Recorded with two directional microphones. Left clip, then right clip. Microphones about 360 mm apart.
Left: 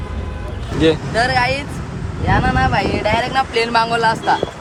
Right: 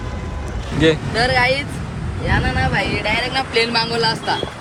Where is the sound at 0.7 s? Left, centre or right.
Centre.